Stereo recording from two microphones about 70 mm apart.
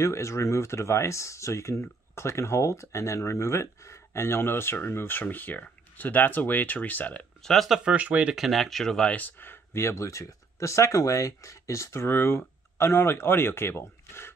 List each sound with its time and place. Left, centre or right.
0.0 s speech: left
7.4 s speech: centre
7.8 s speech: centre
8.4 s speech: centre
9.1 s speech: left